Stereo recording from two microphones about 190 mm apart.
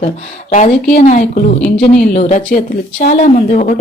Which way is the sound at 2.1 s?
35° left (ahead or behind).